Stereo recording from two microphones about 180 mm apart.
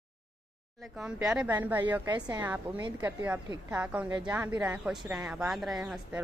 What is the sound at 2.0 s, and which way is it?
A woman's voice, 20° right (ahead or behind).